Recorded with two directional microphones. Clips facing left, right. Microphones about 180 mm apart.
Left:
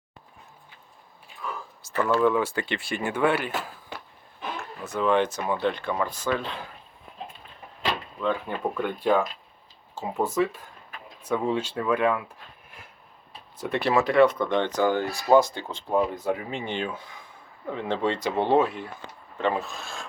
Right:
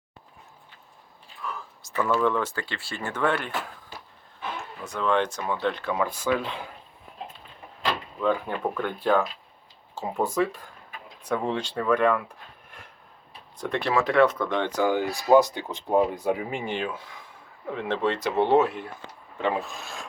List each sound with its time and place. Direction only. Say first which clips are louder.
1.5 s speech: left 1 dB; centre (ahead or behind)
4.8 s speech: left 2 dB; 5° left (ahead or behind)
8.2 s speech: right 2 dB; centre (ahead or behind)
13.6 s speech: left 2 dB; 5° left (ahead or behind); by 20.0 s 15° right (ahead or behind)